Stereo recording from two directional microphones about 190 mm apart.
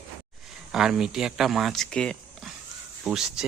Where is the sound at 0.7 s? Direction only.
5° right (ahead or behind).